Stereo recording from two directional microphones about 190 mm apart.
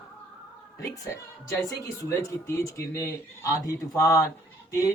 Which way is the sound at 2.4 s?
15° left (ahead or behind).